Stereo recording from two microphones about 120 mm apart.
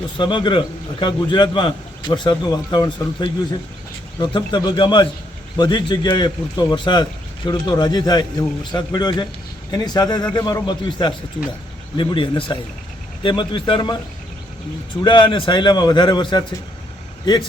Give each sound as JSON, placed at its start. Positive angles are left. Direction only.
{"t": 0.2, "sound": "speech", "side_deg": 40}
{"t": 15.0, "sound": "speech", "side_deg": 45}